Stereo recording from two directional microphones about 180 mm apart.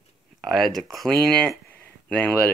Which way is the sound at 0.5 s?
Centre (ahead or behind).